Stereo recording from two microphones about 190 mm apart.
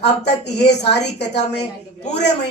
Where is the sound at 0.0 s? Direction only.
60° left (ahead or behind).